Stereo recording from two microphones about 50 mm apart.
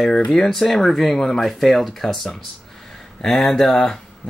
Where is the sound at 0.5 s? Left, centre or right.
Centre.